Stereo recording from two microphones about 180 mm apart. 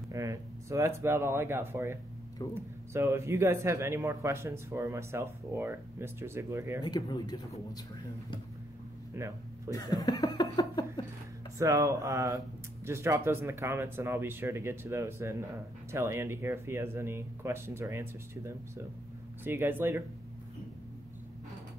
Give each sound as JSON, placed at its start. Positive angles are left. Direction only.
{"t": 0.1, "sound": "speech", "side_deg": -15}
{"t": 2.4, "sound": "speech", "side_deg": 20}
{"t": 2.9, "sound": "a man's voice", "side_deg": -15}
{"t": 6.8, "sound": "speech", "side_deg": 20}
{"t": 9.1, "sound": "a man's voice", "side_deg": -15}
{"t": 9.7, "sound": "speech", "side_deg": 20}
{"t": 11.5, "sound": "a man's voice", "side_deg": -15}